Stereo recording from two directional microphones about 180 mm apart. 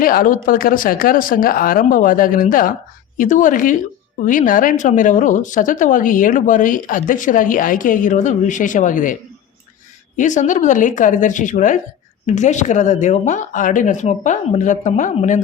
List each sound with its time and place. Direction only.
0.0 s a woman's voice: 50° left (ahead or behind)
10.2 s a woman's voice: 45° left (ahead or behind)